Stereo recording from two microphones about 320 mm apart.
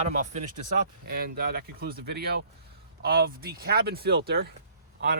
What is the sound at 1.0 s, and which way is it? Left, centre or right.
Speech, right.